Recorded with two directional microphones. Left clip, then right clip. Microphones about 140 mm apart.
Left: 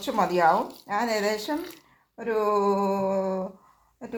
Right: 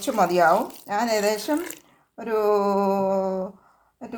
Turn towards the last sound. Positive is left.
turn(degrees=-5)  # may be behind; listen again after turning